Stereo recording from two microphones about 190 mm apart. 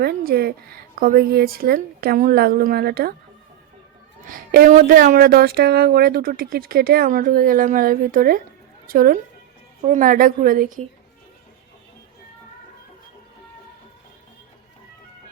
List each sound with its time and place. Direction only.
0.0 s a woman's voice: 55° right (ahead or behind)
4.2 s a woman's voice: 50° right (ahead or behind)